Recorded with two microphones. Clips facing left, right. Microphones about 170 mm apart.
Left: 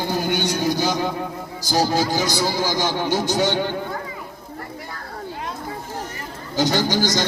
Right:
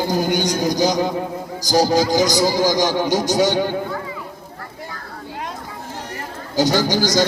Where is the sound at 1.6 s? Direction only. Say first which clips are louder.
Right 4 dB; 40° right (ahead or behind).